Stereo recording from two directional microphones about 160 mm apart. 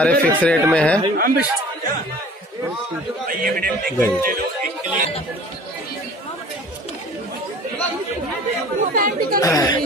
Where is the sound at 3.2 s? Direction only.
60° right (ahead or behind).